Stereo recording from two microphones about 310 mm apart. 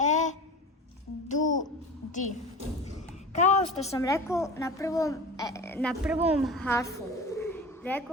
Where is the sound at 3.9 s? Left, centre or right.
Centre.